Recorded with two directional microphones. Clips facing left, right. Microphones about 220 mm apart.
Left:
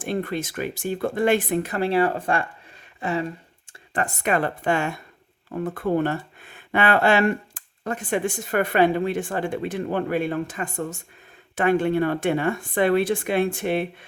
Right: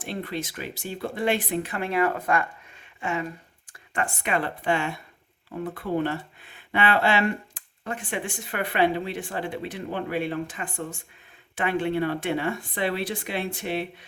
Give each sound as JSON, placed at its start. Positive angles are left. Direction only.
{"t": 0.0, "sound": "speech", "side_deg": 50}